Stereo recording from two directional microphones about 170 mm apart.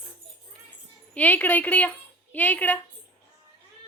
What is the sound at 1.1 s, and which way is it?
A woman's voice, 10° left (ahead or behind).